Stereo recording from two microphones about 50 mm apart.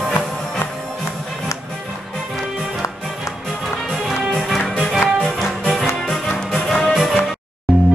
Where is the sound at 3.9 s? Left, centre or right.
Centre.